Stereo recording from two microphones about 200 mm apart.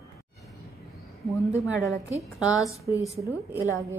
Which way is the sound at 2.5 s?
15° left (ahead or behind).